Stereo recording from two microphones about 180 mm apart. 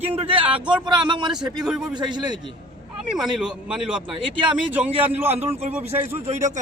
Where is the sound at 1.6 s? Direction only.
5° right (ahead or behind).